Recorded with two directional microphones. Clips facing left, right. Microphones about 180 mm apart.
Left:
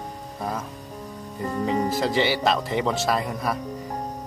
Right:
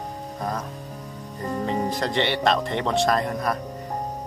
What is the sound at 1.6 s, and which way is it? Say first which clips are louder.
Speech: left 3 dB; 5° left (ahead or behind).